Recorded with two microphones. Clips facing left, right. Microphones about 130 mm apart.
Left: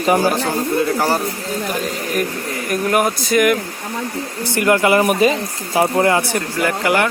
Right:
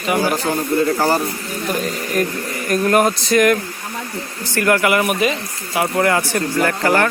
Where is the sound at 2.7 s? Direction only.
5° left (ahead or behind).